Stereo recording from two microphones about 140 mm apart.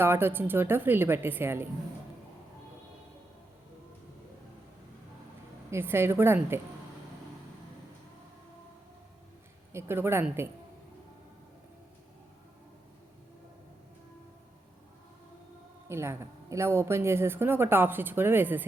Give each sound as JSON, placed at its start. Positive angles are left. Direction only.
{"t": 0.0, "sound": "speech", "side_deg": -15}
{"t": 5.7, "sound": "speech", "side_deg": -15}
{"t": 9.7, "sound": "speech", "side_deg": -15}
{"t": 15.9, "sound": "speech", "side_deg": -20}